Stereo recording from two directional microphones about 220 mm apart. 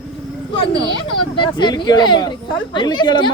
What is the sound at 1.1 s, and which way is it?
Speech, 20° left (ahead or behind).